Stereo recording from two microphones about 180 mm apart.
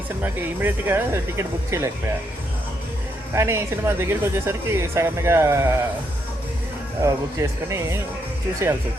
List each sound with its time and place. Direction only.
0.2 s speech: 10° right (ahead or behind)
3.3 s speech: 15° right (ahead or behind)
7.0 s speech: 15° right (ahead or behind)